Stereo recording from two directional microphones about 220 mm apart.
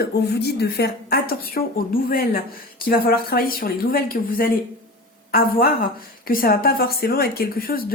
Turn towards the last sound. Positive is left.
turn(degrees=40)  # may be behind; listen again after turning